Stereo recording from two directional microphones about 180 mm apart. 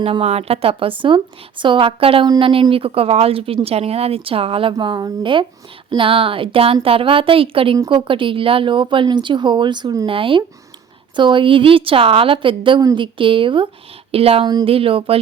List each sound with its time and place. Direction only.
0.0 s a woman's voice: 35° right (ahead or behind)